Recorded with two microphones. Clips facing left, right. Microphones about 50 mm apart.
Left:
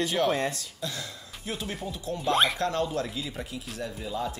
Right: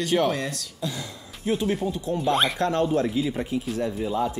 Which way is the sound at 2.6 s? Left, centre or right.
Right.